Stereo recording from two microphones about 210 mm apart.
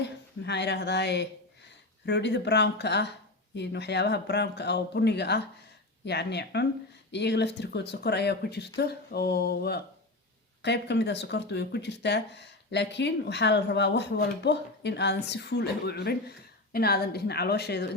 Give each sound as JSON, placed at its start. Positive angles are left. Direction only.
{"t": 0.0, "sound": "speech", "side_deg": 55}